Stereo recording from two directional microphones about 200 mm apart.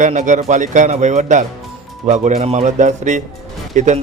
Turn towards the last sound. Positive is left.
turn(degrees=-35)  # may be behind; listen again after turning